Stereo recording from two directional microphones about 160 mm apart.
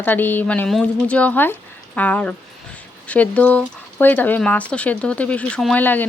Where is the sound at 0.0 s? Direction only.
10° left (ahead or behind).